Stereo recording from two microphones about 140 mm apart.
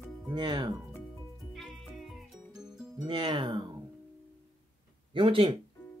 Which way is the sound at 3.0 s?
35° right (ahead or behind).